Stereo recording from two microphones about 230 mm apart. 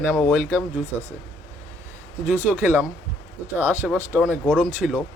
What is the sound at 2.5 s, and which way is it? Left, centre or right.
Speech, centre.